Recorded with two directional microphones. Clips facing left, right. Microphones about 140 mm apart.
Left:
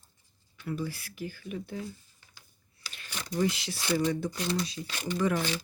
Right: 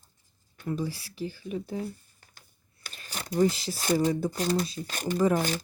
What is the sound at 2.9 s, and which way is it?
Speech, 40° right (ahead or behind).